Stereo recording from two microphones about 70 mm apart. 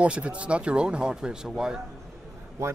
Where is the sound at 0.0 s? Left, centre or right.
Centre.